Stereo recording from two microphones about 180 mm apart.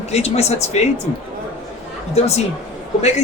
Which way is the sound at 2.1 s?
35° left (ahead or behind).